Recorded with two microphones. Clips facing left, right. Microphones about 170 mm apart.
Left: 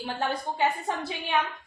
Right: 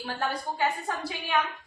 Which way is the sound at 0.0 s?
20° left (ahead or behind).